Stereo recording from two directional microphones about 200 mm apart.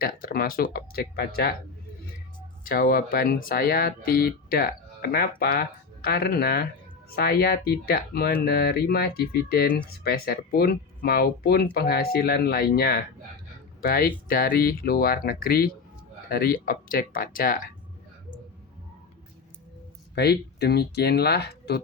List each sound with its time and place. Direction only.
0.0 s speech: 45° left (ahead or behind)
2.6 s speech: 45° left (ahead or behind)
20.1 s speech: 55° left (ahead or behind)